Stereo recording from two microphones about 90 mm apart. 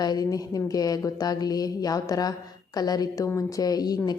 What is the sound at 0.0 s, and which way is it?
A woman's voice, 45° left (ahead or behind).